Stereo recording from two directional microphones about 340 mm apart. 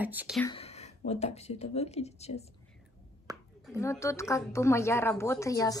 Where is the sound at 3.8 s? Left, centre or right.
Centre.